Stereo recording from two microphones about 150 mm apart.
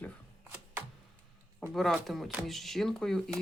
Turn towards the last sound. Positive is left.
turn(degrees=5)  # may be behind; listen again after turning